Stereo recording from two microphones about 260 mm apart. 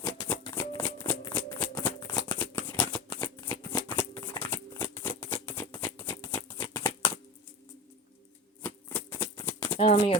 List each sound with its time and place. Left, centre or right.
0.0 s shuffling cards: centre
8.6 s shuffling cards: centre
9.7 s speech: centre